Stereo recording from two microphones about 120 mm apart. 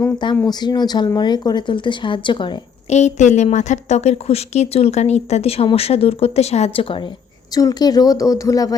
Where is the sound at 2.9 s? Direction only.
75° left (ahead or behind); by 7.1 s 50° left (ahead or behind).